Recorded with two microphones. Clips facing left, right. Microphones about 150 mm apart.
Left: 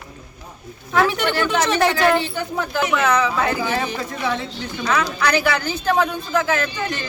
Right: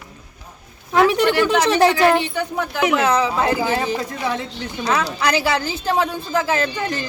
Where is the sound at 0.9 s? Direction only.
15° right (ahead or behind).